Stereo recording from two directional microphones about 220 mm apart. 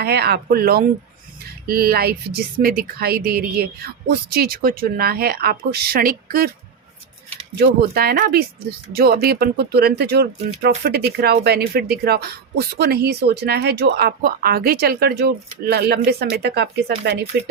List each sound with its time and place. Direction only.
0.0 s speech: 45° right (ahead or behind)
7.5 s speech: 45° right (ahead or behind)